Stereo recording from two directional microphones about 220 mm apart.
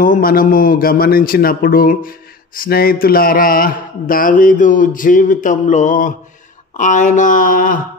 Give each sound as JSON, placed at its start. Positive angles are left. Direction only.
{"t": 0.0, "sound": "a man's voice", "side_deg": 40}